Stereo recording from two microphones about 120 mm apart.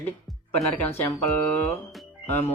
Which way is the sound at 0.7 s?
15° left (ahead or behind).